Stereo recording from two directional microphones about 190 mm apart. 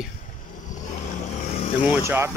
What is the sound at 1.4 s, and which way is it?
Vehicle, 35° left (ahead or behind).